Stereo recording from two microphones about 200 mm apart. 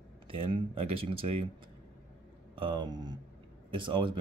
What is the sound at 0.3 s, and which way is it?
Speech, 25° right (ahead or behind).